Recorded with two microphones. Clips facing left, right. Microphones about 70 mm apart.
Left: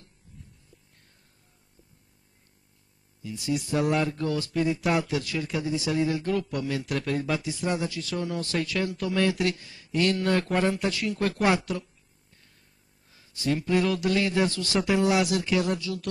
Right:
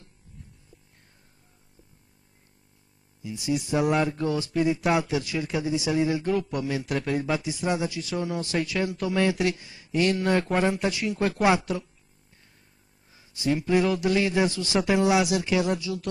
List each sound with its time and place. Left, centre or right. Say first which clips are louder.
3.2 s speech: right 1 dB; centre
11.6 s speech: right 2 dB; centre
13.1 s speech: right 2 dB; centre
14.8 s speech: right 1 dB; centre
15.0 s speech: right 2 dB; centre